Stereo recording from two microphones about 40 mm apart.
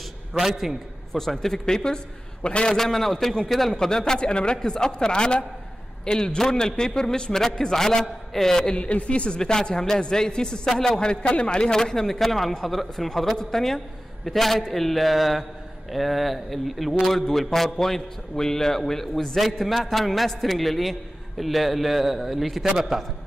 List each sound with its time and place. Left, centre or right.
0.3 s a man's voice: centre
1.1 s a man's voice: centre; by 2.7 s left
2.7 s a man's voice: centre
3.7 s a man's voice: centre
8.7 s speech: left
9.4 s a man's voice: centre
11.0 s speech: left
11.8 s a man's voice: centre